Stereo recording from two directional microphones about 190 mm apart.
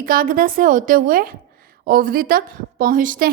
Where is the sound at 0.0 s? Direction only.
50° right (ahead or behind).